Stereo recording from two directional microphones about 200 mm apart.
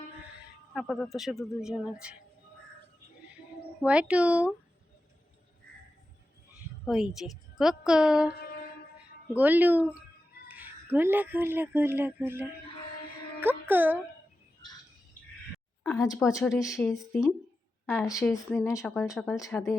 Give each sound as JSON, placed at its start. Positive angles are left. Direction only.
{"t": 0.7, "sound": "speech", "side_deg": 5}
{"t": 3.8, "sound": "speech", "side_deg": -5}
{"t": 6.8, "sound": "a woman's voice", "side_deg": 0}
{"t": 9.3, "sound": "speech", "side_deg": -10}
{"t": 15.8, "sound": "a woman's voice", "side_deg": 5}
{"t": 18.3, "sound": "speech", "side_deg": 5}